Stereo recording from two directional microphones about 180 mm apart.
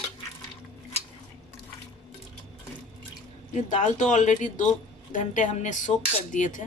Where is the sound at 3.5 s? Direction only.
45° left (ahead or behind).